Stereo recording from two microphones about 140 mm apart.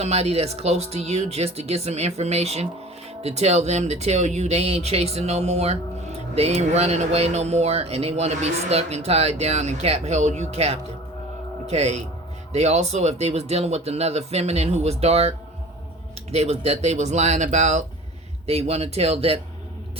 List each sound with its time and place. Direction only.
0.0 s speech: 50° right (ahead or behind)
16.3 s speech: 45° right (ahead or behind)